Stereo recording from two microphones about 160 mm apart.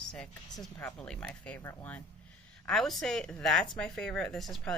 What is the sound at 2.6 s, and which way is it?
Speech, 5° left (ahead or behind).